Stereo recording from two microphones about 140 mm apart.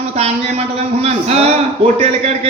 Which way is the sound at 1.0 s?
50° right (ahead or behind).